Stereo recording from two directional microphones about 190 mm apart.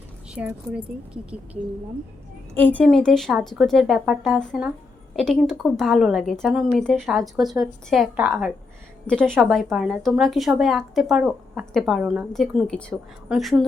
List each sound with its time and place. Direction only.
0.3 s speech: 5° right (ahead or behind)
2.6 s a woman's voice: 10° left (ahead or behind)